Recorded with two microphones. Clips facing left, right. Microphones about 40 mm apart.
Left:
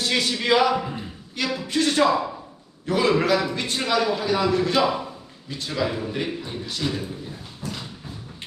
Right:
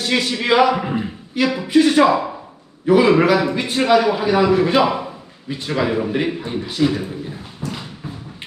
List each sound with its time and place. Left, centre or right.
0.0 s a man's voice: centre
0.7 s speech: right
1.4 s a man's voice: centre
7.7 s a sound: centre